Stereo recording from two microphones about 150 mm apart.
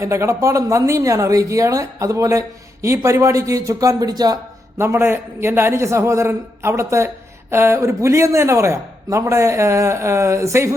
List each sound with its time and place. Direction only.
0.0 s a man's voice: 20° right (ahead or behind)